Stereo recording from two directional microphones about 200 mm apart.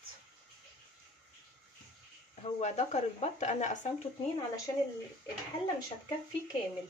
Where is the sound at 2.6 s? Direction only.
35° left (ahead or behind).